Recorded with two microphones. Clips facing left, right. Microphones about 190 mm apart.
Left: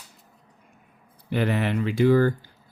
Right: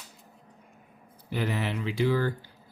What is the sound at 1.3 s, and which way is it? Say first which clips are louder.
Speech: left 6 dB; 65° left (ahead or behind).